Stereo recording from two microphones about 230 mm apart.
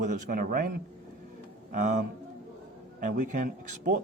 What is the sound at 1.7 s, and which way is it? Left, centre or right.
Speech, right.